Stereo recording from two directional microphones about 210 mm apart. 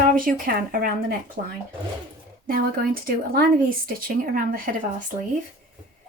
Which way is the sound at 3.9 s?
45° right (ahead or behind).